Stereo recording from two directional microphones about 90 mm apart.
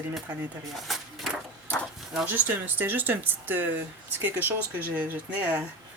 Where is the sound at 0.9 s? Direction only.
Centre (ahead or behind).